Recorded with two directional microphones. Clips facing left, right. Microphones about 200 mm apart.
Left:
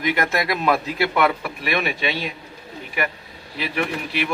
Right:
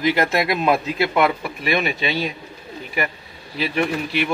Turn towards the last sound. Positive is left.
turn(degrees=-25)  # may be behind; listen again after turning